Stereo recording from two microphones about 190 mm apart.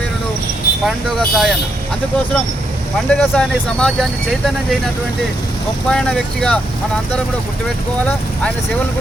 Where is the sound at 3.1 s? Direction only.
5° left (ahead or behind).